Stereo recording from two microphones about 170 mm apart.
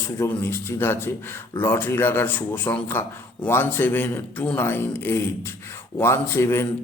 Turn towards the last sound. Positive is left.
turn(degrees=15)  # may be behind; listen again after turning